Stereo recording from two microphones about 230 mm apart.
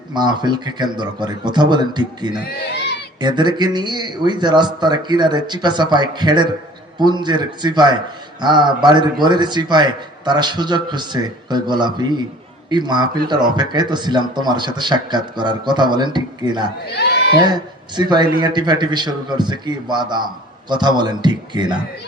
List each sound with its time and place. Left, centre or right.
0.1 s speech: centre
16.9 s a sound: left
17.5 s speech: centre